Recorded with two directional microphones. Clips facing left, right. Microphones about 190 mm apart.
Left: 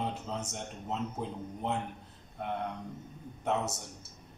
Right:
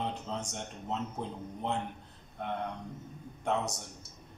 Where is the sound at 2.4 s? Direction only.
5° left (ahead or behind).